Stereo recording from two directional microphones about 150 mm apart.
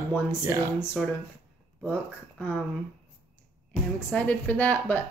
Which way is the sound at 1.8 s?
5° right (ahead or behind).